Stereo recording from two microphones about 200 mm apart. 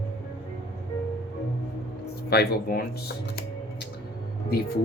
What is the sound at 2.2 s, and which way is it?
Speech, 50° left (ahead or behind).